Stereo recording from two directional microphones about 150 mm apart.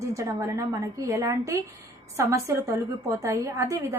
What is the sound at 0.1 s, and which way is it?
A woman's voice, 20° right (ahead or behind).